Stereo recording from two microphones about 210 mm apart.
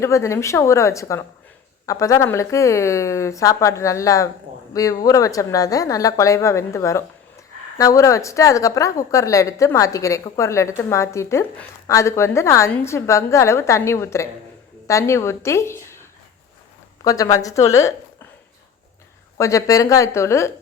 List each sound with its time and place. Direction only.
0.0 s a woman's voice: 15° left (ahead or behind)
19.4 s a woman's voice: 15° left (ahead or behind)